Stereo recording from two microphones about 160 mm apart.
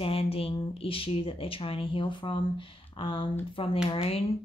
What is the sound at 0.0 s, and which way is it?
Speech, 35° left (ahead or behind).